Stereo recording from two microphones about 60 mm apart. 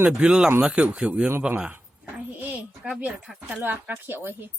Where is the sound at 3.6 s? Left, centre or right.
Right.